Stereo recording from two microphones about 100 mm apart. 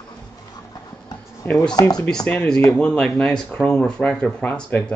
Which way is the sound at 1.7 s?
40° left (ahead or behind).